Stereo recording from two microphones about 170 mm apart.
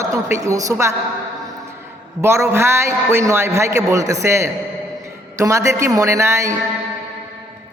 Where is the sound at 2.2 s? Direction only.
15° right (ahead or behind).